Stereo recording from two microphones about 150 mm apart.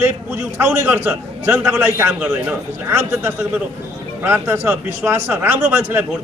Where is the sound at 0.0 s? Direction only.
15° right (ahead or behind).